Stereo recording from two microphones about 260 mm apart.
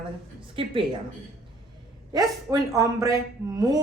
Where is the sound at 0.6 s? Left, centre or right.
Right.